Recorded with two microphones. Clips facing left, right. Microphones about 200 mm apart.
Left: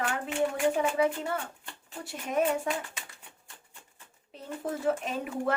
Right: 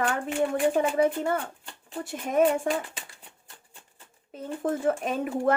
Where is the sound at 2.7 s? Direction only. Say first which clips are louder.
Right 5 dB; 50° right (ahead or behind).